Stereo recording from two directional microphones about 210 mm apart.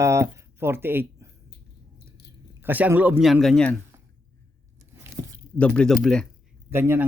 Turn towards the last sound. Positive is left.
turn(degrees=-10)  # may be behind; listen again after turning